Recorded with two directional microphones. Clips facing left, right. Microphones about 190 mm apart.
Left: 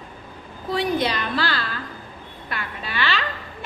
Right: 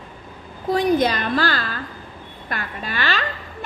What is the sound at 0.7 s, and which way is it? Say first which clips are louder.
A woman's voice: right 5 dB; 45° right (ahead or behind).